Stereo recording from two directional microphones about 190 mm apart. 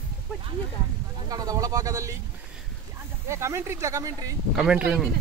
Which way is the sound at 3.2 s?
15° right (ahead or behind).